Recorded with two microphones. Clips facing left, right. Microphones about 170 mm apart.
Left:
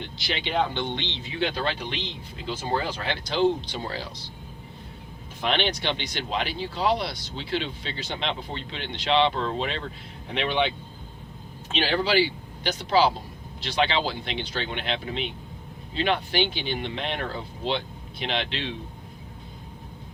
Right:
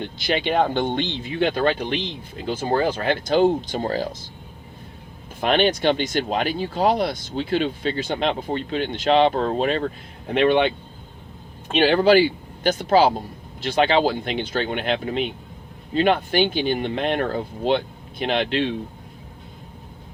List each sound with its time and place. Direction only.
0.0 s speech: 50° right (ahead or behind)
5.4 s speech: 50° right (ahead or behind)
11.7 s speech: 55° right (ahead or behind)